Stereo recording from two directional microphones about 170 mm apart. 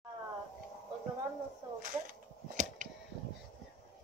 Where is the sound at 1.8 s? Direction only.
55° right (ahead or behind).